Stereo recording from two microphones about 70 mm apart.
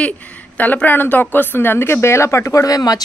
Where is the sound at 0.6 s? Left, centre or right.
Left.